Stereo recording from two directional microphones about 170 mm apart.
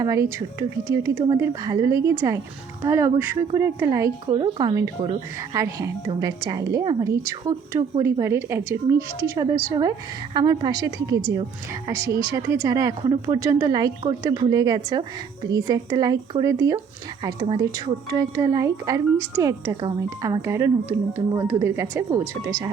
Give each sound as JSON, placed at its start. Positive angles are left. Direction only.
{"t": 0.0, "sound": "a woman's voice", "side_deg": -20}
{"t": 4.3, "sound": "a woman's voice", "side_deg": -30}